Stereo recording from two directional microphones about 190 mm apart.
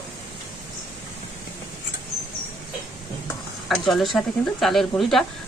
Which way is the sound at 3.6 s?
Centre (ahead or behind).